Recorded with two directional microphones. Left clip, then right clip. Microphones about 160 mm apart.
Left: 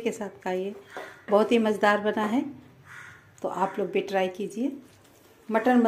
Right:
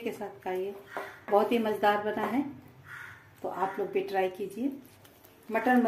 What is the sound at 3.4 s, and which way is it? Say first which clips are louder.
Speech: left 4 dB; 50° left (ahead or behind).